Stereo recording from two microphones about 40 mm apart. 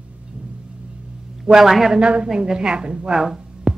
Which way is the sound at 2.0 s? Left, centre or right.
Right.